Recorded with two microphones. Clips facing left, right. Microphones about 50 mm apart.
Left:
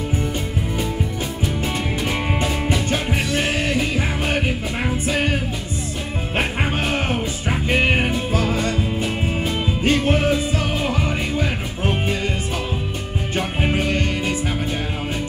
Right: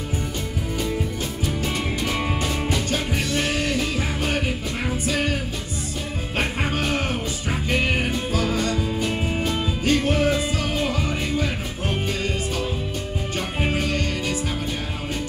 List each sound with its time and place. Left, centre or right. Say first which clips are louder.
2.4 s music: left 3 dB; left
9.8 s music: left 2 dB; left
13.6 s music: left 2 dB; left